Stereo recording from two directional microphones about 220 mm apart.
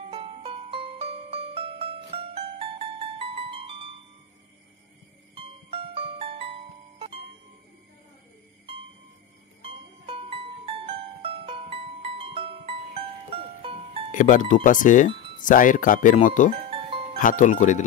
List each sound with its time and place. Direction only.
0.1 s music: 25° right (ahead or behind)
5.3 s music: 25° right (ahead or behind)
10.0 s music: 25° right (ahead or behind)
14.1 s speech: 35° left (ahead or behind)